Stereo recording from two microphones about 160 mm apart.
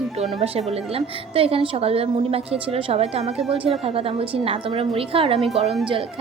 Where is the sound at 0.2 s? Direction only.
40° right (ahead or behind).